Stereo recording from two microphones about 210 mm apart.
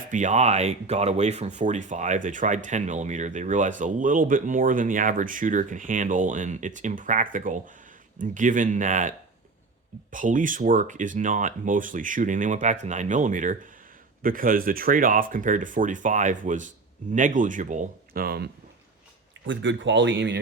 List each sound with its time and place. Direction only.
0.1 s speech: 35° right (ahead or behind)
19.5 s speech: 60° right (ahead or behind)